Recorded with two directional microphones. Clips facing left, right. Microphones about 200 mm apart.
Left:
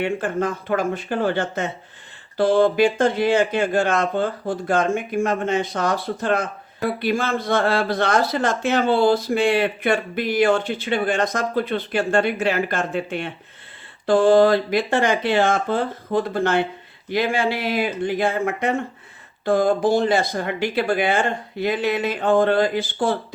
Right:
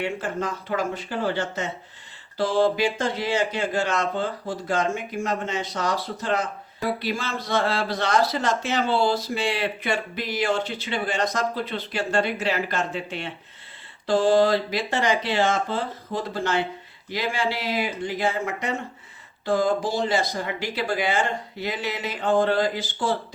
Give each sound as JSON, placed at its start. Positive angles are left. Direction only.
{"t": 0.0, "sound": "speech", "side_deg": 55}